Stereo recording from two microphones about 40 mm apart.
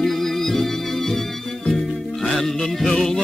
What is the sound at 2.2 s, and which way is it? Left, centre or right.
Music, centre.